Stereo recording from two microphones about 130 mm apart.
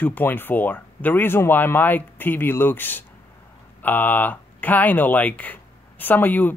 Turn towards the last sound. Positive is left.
turn(degrees=15)  # may be behind; listen again after turning